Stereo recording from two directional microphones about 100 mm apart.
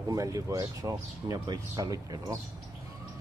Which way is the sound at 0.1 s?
35° right (ahead or behind).